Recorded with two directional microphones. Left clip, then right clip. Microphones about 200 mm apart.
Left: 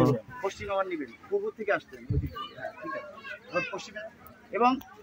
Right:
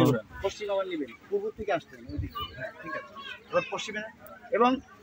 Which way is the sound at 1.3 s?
50° left (ahead or behind).